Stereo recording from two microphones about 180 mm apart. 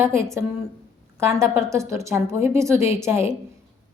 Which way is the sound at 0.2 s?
15° right (ahead or behind).